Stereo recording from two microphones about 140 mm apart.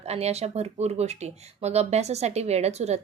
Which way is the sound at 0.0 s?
50° right (ahead or behind).